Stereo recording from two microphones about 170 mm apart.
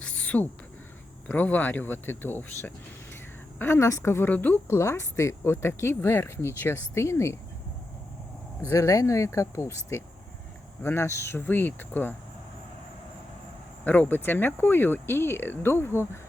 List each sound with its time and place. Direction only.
0.0 s a sound: 5° left (ahead or behind)
1.3 s a woman's voice: 10° left (ahead or behind)
8.6 s a woman's voice: 15° left (ahead or behind)
13.8 s a woman's voice: 10° left (ahead or behind)